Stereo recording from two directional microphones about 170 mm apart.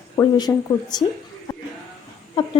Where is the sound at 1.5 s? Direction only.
20° left (ahead or behind).